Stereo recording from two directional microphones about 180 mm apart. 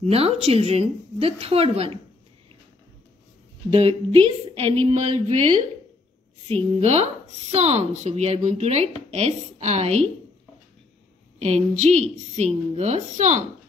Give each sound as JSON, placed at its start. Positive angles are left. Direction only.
{"t": 0.0, "sound": "a woman's voice", "side_deg": -35}
{"t": 3.7, "sound": "a woman's voice", "side_deg": -30}
{"t": 6.4, "sound": "a woman's voice", "side_deg": -35}
{"t": 11.3, "sound": "a woman's voice", "side_deg": -40}